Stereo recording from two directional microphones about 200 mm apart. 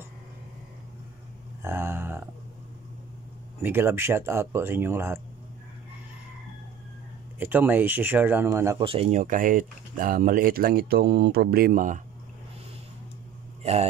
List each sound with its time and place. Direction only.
1.6 s a sound: 10° right (ahead or behind)
3.6 s speech: 10° right (ahead or behind)
7.3 s speech: 10° right (ahead or behind)
8.8 s speech: 30° right (ahead or behind)
9.2 s speech: 45° right (ahead or behind)